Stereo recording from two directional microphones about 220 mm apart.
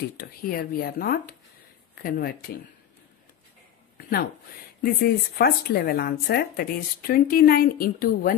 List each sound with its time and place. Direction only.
0.2 s speech: 40° left (ahead or behind)
5.0 s speech: 45° left (ahead or behind)